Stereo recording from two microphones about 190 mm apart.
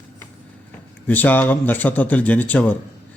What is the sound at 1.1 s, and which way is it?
A man's voice, 10° left (ahead or behind).